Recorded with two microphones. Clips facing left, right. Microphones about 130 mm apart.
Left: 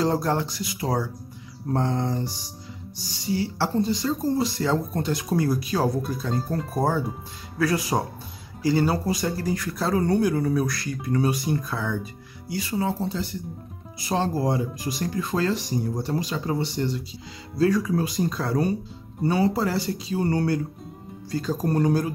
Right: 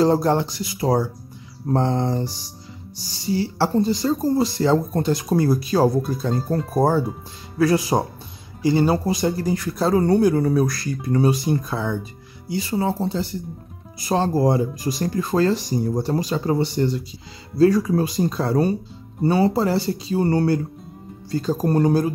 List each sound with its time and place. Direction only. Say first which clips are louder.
0.0 s speech: right 6 dB; 30° right (ahead or behind)
3.3 s speech: right 4 dB; 35° right (ahead or behind)
7.5 s speech: right 5 dB; 25° right (ahead or behind); by 17.0 s 45° right (ahead or behind)
17.6 s speech: right 5 dB; 35° right (ahead or behind)